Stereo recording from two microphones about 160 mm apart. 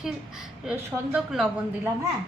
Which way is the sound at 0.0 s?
5° right (ahead or behind).